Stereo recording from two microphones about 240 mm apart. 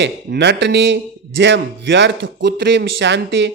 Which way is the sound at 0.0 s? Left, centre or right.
Right.